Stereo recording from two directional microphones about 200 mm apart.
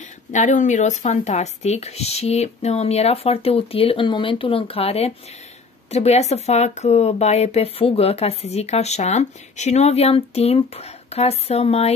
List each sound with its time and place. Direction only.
0.3 s speech: 35° left (ahead or behind)